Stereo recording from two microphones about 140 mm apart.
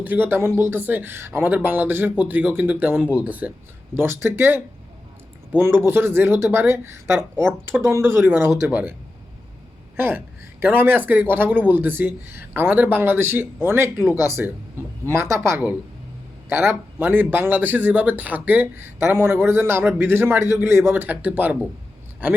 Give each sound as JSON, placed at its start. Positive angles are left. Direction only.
{"t": 0.0, "sound": "speech", "side_deg": -15}
{"t": 10.0, "sound": "a woman's voice", "side_deg": -15}